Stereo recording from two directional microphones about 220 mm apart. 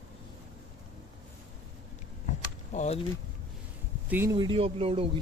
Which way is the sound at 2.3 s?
30° left (ahead or behind).